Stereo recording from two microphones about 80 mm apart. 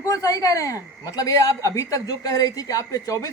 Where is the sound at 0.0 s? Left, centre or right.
Left.